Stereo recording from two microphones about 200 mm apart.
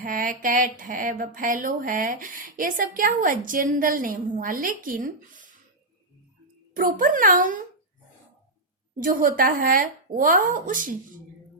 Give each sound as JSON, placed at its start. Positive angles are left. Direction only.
{"t": 0.0, "sound": "a woman's voice", "side_deg": -45}
{"t": 6.7, "sound": "a woman's voice", "side_deg": -40}
{"t": 9.0, "sound": "a woman's voice", "side_deg": -40}